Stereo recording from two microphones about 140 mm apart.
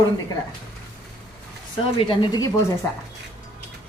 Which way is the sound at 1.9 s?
35° left (ahead or behind).